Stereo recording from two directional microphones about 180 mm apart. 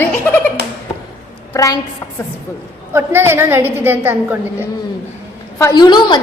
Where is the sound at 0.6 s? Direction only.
60° right (ahead or behind).